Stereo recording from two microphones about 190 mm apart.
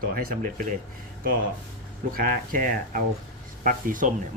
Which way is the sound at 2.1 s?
45° right (ahead or behind).